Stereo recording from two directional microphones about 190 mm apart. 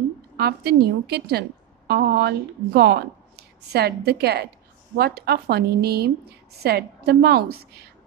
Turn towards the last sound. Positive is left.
turn(degrees=-55)  # may be behind; listen again after turning